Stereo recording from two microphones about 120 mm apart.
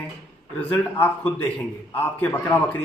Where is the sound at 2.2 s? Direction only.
20° left (ahead or behind).